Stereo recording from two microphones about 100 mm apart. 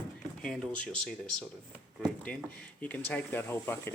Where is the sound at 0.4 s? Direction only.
5° left (ahead or behind).